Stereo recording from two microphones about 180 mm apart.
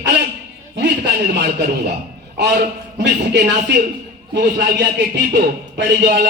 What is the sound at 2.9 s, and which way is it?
A man's voice, 65° right (ahead or behind).